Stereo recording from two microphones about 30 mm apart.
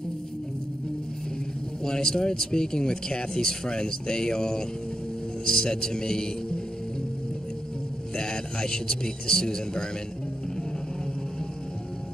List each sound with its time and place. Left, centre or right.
1.9 s a man's voice: left
8.2 s a man's voice: left